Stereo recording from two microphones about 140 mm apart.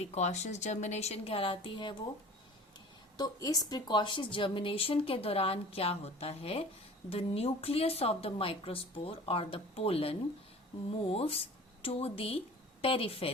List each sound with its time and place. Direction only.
0.0 s speech: 50° left (ahead or behind); by 2.0 s 35° left (ahead or behind)
3.2 s speech: 25° left (ahead or behind); by 13.3 s 45° left (ahead or behind)